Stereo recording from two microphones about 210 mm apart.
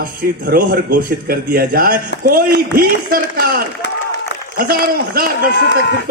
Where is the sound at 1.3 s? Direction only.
45° right (ahead or behind).